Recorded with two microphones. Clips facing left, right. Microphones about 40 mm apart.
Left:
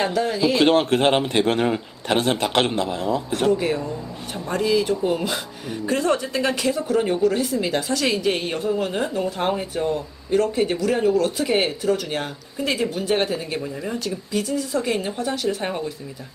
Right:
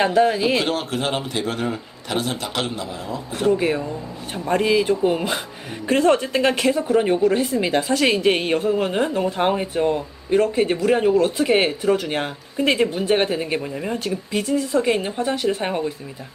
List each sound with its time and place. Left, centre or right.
0.0 s a woman's voice: right
0.6 s a man's voice: left
3.6 s speech: centre
4.4 s a woman's voice: right
12.5 s speech: right
13.0 s a woman's voice: right
13.9 s speech: right
15.6 s a woman's voice: centre